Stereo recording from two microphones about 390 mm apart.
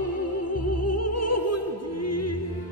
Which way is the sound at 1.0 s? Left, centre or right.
Left.